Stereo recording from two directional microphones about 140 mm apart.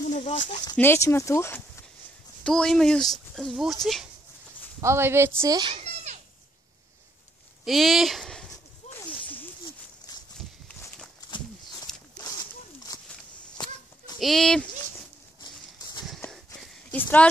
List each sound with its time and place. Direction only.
0.0 s a sound: 60° left (ahead or behind)
0.7 s speech: 15° left (ahead or behind)
2.4 s speech: 5° left (ahead or behind)
4.8 s speech: 15° right (ahead or behind)
5.6 s a child's voice: 35° right (ahead or behind)
7.6 s speech: centre (ahead or behind)
8.9 s a sound: 15° left (ahead or behind)
11.2 s horse: 30° left (ahead or behind)
12.9 s a sound: 30° left (ahead or behind)
14.2 s speech: centre (ahead or behind)
15.4 s bird: 30° left (ahead or behind)
16.9 s speech: 10° left (ahead or behind)